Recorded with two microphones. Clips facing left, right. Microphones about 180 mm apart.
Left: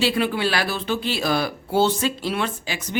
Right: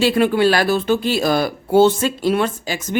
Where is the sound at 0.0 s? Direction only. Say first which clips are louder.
Right 7 dB; 45° right (ahead or behind).